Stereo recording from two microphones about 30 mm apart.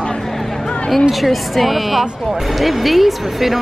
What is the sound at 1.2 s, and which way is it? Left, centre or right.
Speech, centre.